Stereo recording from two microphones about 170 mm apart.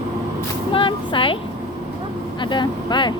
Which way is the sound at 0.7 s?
30° left (ahead or behind).